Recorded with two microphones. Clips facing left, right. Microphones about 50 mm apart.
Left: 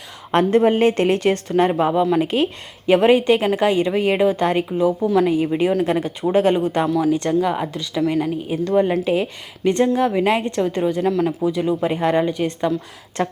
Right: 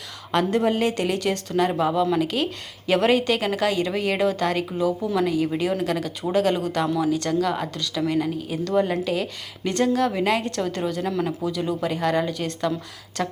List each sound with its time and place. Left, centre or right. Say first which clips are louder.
0.3 s a woman's voice: left 6 dB; left
11.1 s speech: left 5 dB; centre
11.4 s a woman's voice: left 5 dB; centre